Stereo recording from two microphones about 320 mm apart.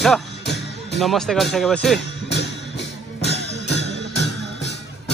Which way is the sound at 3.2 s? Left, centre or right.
Left.